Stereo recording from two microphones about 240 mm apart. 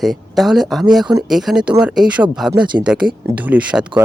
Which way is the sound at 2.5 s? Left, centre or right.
Centre.